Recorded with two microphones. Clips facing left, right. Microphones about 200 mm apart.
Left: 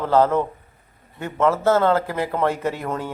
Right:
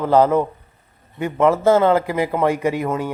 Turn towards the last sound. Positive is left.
turn(degrees=-10)  # may be behind; listen again after turning